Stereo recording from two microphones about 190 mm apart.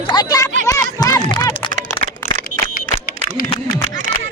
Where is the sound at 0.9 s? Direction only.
20° left (ahead or behind).